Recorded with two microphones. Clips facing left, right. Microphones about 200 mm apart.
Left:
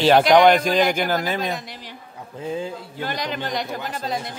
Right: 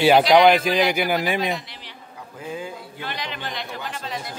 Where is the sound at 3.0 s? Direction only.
45° left (ahead or behind).